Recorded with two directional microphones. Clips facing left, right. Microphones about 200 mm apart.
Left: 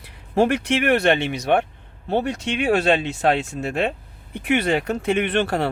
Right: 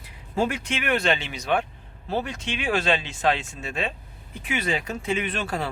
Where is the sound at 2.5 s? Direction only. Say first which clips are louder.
Left 6 dB; 40° left (ahead or behind).